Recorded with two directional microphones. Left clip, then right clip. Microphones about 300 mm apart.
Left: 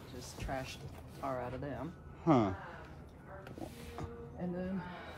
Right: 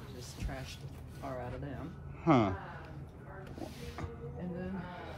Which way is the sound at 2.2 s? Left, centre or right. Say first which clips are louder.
Right 2 dB; centre.